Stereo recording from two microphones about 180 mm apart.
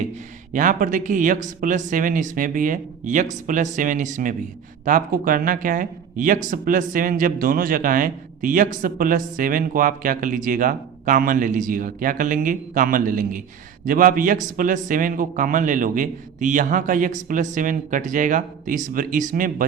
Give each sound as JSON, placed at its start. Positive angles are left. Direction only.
{"t": 0.5, "sound": "speech", "side_deg": -45}